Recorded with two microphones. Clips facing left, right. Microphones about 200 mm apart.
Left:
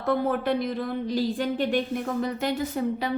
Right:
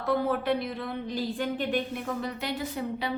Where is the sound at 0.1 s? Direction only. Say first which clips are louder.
Left 2 dB; 50° left (ahead or behind).